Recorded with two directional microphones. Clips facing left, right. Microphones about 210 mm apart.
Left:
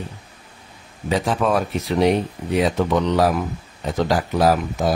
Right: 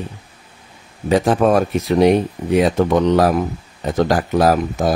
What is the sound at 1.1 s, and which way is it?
Speech, 50° right (ahead or behind).